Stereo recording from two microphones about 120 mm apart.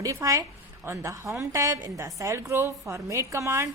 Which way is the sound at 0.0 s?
25° right (ahead or behind).